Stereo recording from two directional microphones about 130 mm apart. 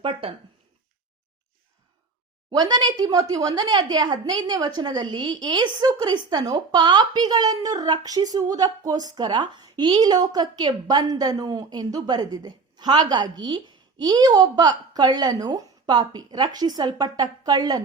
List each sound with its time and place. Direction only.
0.0 s speech: 45° right (ahead or behind)
2.5 s a woman's voice: 30° right (ahead or behind)